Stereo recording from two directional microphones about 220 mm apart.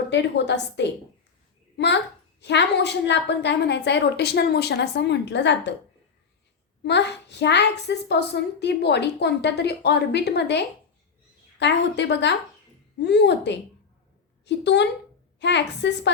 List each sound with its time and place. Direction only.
0.1 s a woman's voice: 50° left (ahead or behind)
6.8 s a woman's voice: 50° left (ahead or behind)